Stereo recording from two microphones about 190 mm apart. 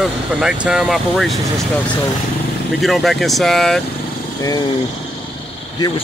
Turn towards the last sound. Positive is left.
turn(degrees=20)  # may be behind; listen again after turning